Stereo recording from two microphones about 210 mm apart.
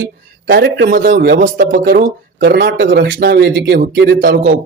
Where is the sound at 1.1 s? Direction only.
55° right (ahead or behind).